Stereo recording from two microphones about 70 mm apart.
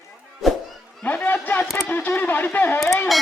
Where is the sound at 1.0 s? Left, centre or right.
Left.